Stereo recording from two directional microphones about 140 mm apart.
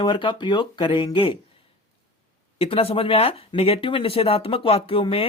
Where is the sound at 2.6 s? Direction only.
45° left (ahead or behind).